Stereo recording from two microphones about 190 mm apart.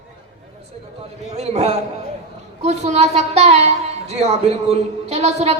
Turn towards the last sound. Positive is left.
turn(degrees=-35)  # may be behind; listen again after turning